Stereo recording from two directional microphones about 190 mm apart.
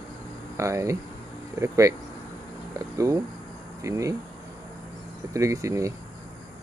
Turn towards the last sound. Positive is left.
turn(degrees=-15)  # may be behind; listen again after turning